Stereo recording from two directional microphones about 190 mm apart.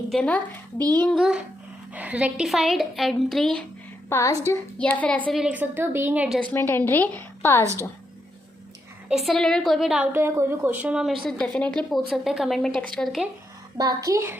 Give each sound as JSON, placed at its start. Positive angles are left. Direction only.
{"t": 0.1, "sound": "a woman's voice", "side_deg": 5}
{"t": 4.1, "sound": "a woman's voice", "side_deg": 15}
{"t": 5.4, "sound": "a woman's voice", "side_deg": -5}
{"t": 6.5, "sound": "a woman's voice", "side_deg": 10}
{"t": 7.6, "sound": "a woman's voice", "side_deg": -15}
{"t": 9.0, "sound": "a woman's voice", "side_deg": 0}
{"t": 13.7, "sound": "a woman's voice", "side_deg": -20}